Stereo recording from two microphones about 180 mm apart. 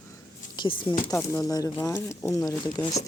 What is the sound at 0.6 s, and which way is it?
Speech, 25° left (ahead or behind).